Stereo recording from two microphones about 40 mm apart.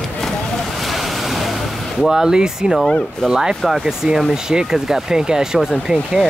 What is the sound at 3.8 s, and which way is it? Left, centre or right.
Speech, centre.